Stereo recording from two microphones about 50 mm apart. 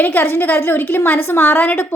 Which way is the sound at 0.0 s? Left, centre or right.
Left.